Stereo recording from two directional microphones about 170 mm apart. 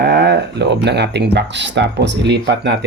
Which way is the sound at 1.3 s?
90° right.